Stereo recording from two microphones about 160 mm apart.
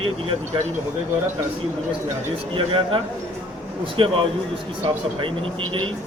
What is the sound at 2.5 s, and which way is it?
A man's voice, 35° right (ahead or behind).